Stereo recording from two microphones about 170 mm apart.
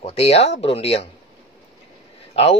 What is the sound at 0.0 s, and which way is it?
Speech, 35° left (ahead or behind).